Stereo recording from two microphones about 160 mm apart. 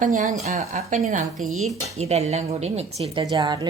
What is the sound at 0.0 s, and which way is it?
Speech, 50° right (ahead or behind).